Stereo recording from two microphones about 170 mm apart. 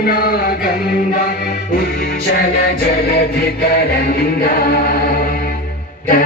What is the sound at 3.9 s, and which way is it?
Music, 65° left (ahead or behind).